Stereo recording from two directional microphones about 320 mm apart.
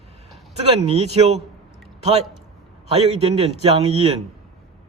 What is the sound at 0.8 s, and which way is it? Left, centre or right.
Speech, centre.